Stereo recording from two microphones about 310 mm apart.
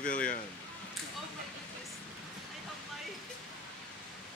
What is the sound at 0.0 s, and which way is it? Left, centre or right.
Speech, left.